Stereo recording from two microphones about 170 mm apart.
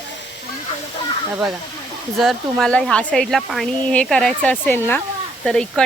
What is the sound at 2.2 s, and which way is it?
Speech, centre (ahead or behind).